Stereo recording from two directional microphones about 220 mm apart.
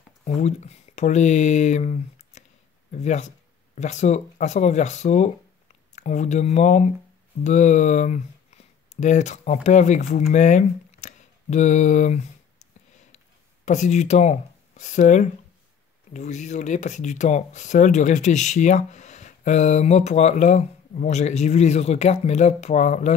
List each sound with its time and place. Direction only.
0.2 s speech: 30° left (ahead or behind)
13.7 s speech: 30° left (ahead or behind)